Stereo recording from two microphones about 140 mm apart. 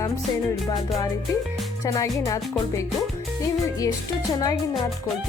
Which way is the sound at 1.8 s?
25° left (ahead or behind).